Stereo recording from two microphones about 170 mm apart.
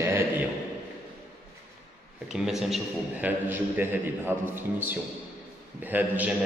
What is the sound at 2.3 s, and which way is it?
A man's voice, centre (ahead or behind).